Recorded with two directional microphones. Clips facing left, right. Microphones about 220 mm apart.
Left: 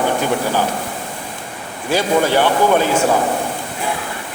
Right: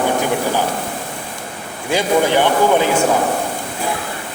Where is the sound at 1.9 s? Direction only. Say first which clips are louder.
Even; 15° right (ahead or behind).